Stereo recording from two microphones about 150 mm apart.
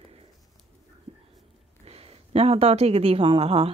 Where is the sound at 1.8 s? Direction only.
40° right (ahead or behind).